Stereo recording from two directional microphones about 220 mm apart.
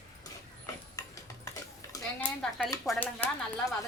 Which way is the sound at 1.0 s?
15° left (ahead or behind).